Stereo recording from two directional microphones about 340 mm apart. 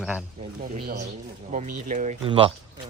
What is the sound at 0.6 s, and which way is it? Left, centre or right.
Speech, right.